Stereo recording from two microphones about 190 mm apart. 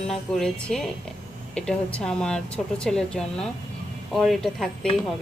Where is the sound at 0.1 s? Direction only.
Centre (ahead or behind).